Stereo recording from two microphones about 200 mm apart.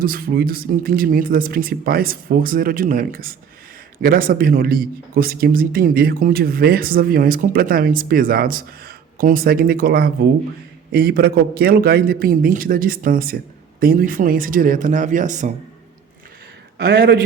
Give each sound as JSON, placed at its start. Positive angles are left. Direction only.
{"t": 0.0, "sound": "a man's voice", "side_deg": -45}
{"t": 16.7, "sound": "a man's voice", "side_deg": -60}